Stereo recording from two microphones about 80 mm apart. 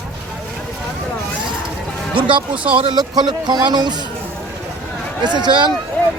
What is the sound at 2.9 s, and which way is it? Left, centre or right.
Speech, right.